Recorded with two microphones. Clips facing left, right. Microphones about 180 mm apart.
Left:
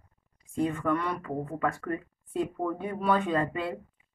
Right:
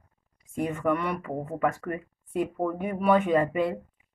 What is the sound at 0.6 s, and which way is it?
Speech, 20° right (ahead or behind).